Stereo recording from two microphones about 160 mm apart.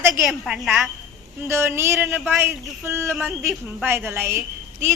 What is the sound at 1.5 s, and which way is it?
Speech, 15° right (ahead or behind).